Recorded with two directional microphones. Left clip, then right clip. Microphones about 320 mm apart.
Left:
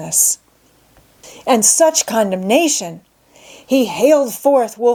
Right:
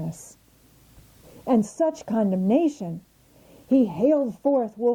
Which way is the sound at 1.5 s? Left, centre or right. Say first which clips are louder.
Left 11 dB; centre.